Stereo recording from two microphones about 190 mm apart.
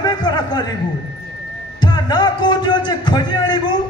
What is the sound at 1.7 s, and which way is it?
A man's voice, 25° left (ahead or behind).